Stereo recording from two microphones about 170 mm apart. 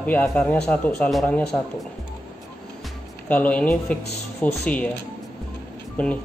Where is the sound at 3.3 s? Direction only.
10° left (ahead or behind).